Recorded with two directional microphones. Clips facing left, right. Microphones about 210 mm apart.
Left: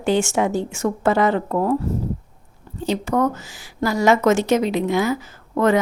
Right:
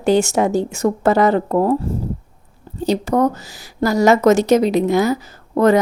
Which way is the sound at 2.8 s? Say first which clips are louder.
Right 4 dB; 35° right (ahead or behind).